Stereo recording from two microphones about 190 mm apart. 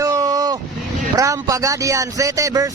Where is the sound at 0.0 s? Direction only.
15° right (ahead or behind).